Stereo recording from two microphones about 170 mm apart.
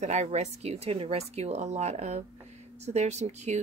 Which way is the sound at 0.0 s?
40° right (ahead or behind).